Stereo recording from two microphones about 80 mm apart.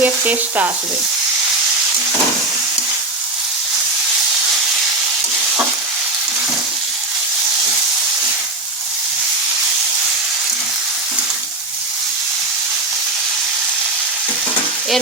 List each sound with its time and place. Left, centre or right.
0.0 s frying: right